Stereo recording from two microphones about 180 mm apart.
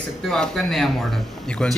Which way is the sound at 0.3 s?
5° left (ahead or behind).